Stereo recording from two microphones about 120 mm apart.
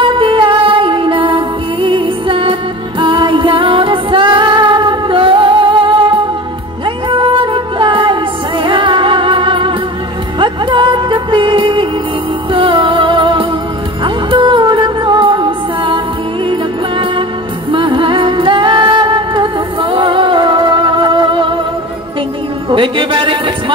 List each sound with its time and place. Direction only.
0.0 s music: 45° right (ahead or behind)
7.1 s music: 45° right (ahead or behind)
17.6 s music: 45° right (ahead or behind)
22.7 s music: 45° right (ahead or behind)